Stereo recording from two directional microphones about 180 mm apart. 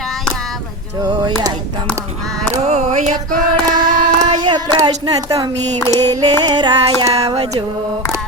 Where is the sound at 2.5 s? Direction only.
40° right (ahead or behind).